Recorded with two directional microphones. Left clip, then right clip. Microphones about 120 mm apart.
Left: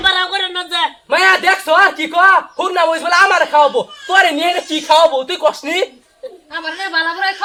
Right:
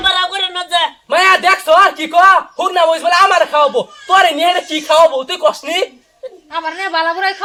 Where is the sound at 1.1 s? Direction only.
5° right (ahead or behind).